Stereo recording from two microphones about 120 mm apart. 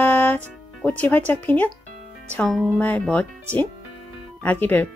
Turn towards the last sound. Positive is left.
turn(degrees=15)  # may be behind; listen again after turning